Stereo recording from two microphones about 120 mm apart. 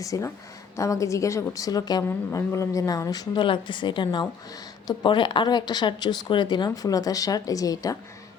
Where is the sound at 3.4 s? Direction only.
40° left (ahead or behind).